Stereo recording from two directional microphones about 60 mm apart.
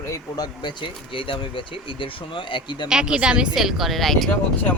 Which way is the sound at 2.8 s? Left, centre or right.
Centre.